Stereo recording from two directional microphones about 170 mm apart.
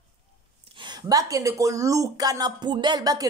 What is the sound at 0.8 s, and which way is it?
A woman's voice, 25° right (ahead or behind).